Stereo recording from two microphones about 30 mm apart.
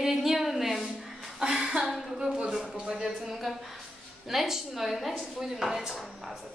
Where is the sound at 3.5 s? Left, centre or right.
Centre.